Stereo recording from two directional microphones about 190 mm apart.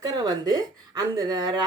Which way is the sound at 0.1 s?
20° right (ahead or behind).